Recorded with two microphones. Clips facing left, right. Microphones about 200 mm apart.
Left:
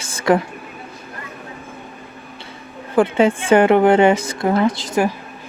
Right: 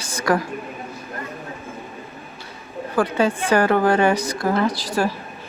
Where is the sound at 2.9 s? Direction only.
25° left (ahead or behind).